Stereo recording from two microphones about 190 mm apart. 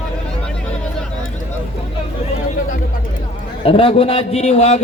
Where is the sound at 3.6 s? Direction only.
30° left (ahead or behind).